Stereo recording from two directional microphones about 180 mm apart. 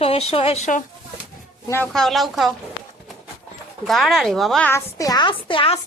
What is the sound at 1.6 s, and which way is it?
Speech, 15° left (ahead or behind).